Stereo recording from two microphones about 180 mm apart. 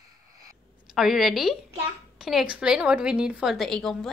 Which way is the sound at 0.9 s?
Centre (ahead or behind).